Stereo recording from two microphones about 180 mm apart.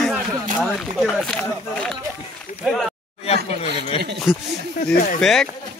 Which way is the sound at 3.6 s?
30° left (ahead or behind).